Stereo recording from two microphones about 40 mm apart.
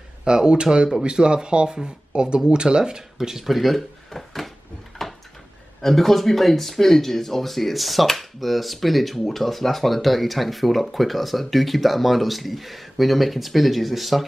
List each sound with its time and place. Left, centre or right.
0.2 s speech: centre
3.2 s speech: centre
4.1 s a sound: centre
5.8 s speech: centre